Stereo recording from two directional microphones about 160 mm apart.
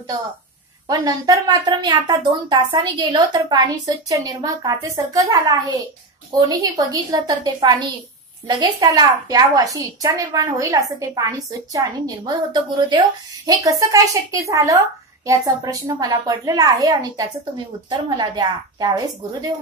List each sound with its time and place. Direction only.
0.8 s a woman's voice: 25° right (ahead or behind)